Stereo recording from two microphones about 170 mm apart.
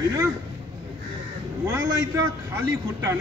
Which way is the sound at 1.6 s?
15° right (ahead or behind).